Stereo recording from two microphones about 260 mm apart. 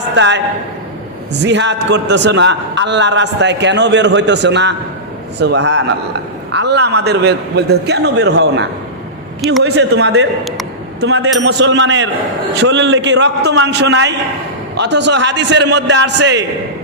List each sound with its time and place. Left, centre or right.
0.2 s a man's voice: right
9.6 s a man's voice: right